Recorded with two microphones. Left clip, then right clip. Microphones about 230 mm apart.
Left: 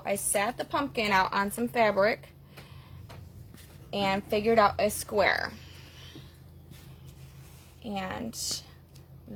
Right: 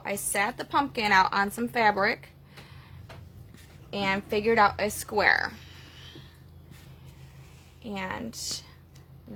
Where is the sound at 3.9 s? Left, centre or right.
Centre.